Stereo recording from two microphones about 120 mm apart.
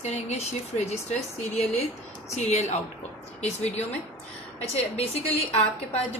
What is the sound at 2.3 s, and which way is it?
Speech, 70° left (ahead or behind).